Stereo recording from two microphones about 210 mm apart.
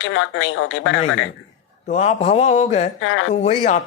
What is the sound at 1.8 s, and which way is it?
Speech, 30° left (ahead or behind).